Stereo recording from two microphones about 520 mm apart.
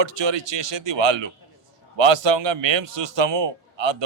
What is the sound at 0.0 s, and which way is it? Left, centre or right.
A man's voice, right.